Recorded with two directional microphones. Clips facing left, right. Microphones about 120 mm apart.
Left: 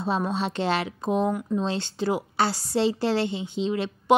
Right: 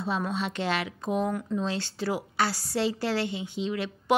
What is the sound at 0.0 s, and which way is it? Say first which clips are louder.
A woman's voice: left 4 dB; 30° left (ahead or behind).